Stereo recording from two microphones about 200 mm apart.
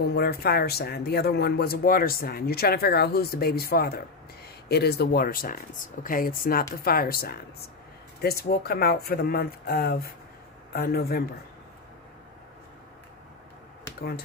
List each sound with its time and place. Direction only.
0.1 s speech: 55° left (ahead or behind)